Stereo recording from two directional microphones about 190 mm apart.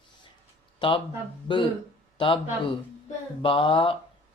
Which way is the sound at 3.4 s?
30° left (ahead or behind).